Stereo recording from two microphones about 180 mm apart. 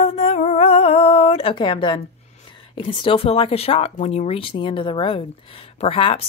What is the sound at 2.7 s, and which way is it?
Speech, 30° left (ahead or behind).